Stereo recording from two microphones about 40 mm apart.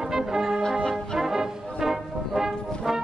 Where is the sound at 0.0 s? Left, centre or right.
Centre.